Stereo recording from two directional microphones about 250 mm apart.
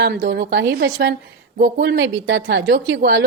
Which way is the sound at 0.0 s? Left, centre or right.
Right.